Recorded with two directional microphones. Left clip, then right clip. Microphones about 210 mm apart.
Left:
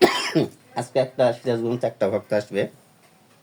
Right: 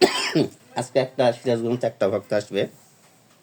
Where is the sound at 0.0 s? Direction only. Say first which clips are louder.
Left 1 dB; 15° right (ahead or behind).